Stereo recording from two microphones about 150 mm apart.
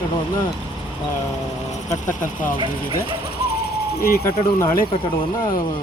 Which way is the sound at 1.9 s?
60° left (ahead or behind).